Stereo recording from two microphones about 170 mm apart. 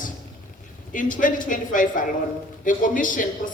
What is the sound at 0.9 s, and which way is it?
Speech, 50° left (ahead or behind).